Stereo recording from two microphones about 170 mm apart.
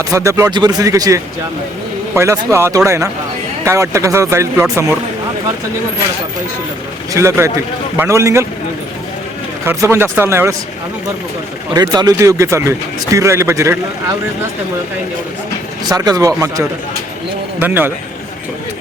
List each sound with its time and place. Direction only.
0.1 s speech: 20° right (ahead or behind)
7.1 s speech: 15° right (ahead or behind)
9.6 s speech: 15° right (ahead or behind)
11.7 s speech: 25° right (ahead or behind)
15.9 s speech: 20° right (ahead or behind)